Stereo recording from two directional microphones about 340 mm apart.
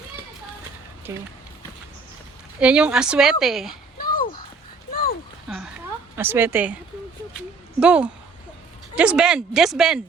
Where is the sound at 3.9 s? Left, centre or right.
Left.